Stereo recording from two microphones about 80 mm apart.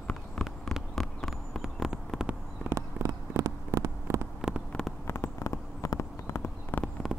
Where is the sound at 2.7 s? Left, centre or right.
Right.